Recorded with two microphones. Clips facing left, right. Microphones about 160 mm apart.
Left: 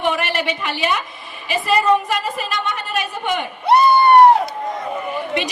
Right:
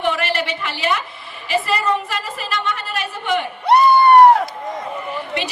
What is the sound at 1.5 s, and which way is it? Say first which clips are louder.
A woman's voice: left 3 dB; 15° left (ahead or behind).